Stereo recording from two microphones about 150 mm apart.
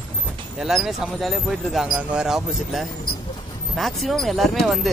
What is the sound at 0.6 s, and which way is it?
Speech, centre (ahead or behind).